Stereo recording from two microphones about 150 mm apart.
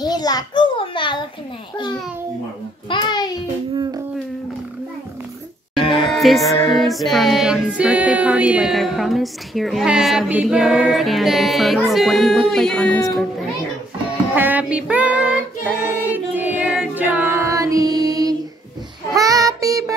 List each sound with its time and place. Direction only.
0.0 s a sound: 25° left (ahead or behind)
2.9 s a child's voice: 30° left (ahead or behind)
3.7 s a sound: 25° right (ahead or behind)
5.8 s music: 35° left (ahead or behind)
6.0 s music: centre (ahead or behind)
14.3 s child singing: 10° right (ahead or behind)
15.6 s choir: 10° right (ahead or behind)
19.1 s child singing: 25° right (ahead or behind)